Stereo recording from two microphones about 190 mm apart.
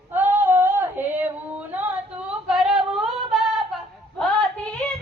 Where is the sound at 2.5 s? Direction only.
5° right (ahead or behind).